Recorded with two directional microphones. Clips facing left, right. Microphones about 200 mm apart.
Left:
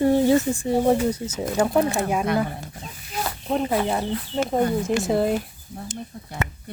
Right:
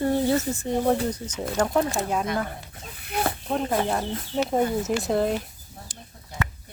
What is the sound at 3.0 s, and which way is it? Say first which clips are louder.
Snake: right 3 dB; 60° right (ahead or behind).